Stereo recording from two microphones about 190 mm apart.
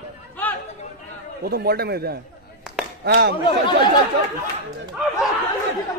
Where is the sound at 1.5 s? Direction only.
55° right (ahead or behind).